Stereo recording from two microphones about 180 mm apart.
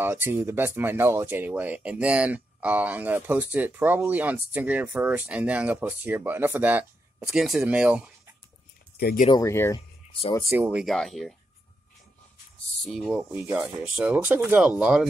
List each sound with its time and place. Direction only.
0.0 s speech: 15° right (ahead or behind)
8.9 s speech: 60° left (ahead or behind)
9.3 s speech: 15° left (ahead or behind)
10.5 s speech: 10° right (ahead or behind)
12.8 s speech: centre (ahead or behind)